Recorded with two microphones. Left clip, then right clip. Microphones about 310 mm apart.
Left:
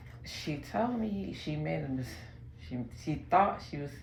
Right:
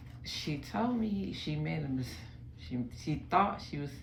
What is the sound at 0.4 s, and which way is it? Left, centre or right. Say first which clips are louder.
Speech: left 3 dB; centre.